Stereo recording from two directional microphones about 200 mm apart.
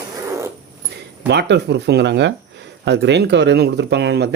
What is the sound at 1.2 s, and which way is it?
Speech, 60° right (ahead or behind).